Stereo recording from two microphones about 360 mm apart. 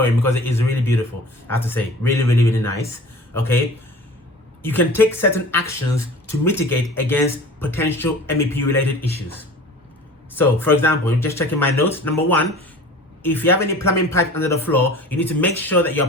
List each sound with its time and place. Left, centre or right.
0.0 s speech: centre
10.3 s speech: centre
13.2 s speech: centre